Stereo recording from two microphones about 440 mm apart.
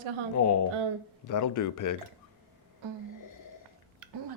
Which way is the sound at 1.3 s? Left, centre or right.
Left.